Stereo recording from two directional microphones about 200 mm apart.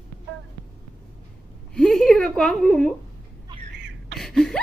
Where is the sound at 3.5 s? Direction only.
25° right (ahead or behind).